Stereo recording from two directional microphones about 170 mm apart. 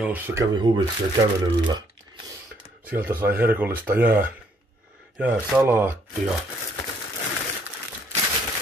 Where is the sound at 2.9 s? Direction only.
15° right (ahead or behind).